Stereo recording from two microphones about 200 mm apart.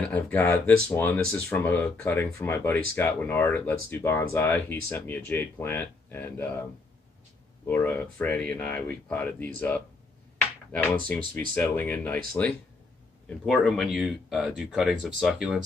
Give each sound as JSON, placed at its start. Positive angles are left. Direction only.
{"t": 0.1, "sound": "speech", "side_deg": 10}
{"t": 7.6, "sound": "speech", "side_deg": 10}
{"t": 11.3, "sound": "speech", "side_deg": 10}
{"t": 13.5, "sound": "speech", "side_deg": 0}